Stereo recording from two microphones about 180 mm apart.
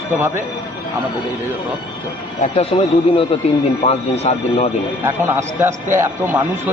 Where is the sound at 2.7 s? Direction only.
30° left (ahead or behind).